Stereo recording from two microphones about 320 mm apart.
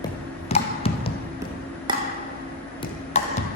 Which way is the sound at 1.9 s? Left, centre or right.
Centre.